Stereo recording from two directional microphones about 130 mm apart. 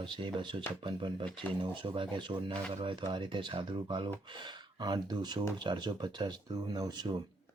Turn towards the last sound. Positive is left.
turn(degrees=-30)  # may be behind; listen again after turning